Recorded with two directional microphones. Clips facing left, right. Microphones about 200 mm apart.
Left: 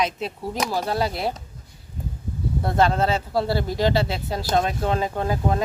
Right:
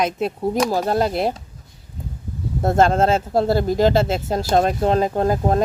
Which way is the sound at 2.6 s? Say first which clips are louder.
Right 5 dB; 45° right (ahead or behind).